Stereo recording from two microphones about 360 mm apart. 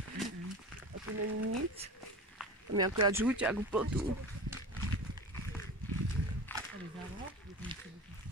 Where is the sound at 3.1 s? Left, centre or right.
Centre.